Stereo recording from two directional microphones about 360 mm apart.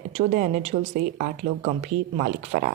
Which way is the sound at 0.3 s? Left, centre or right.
Right.